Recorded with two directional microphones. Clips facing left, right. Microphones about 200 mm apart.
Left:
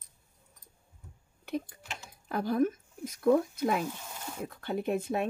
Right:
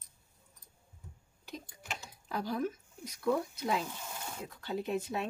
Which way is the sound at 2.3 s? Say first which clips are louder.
Left 7 dB; 55° left (ahead or behind).